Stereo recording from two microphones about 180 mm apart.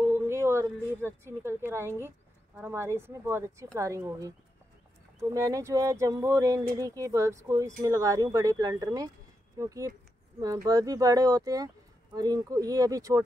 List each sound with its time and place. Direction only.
0.0 s speech: 15° right (ahead or behind)
5.3 s speech: 15° right (ahead or behind)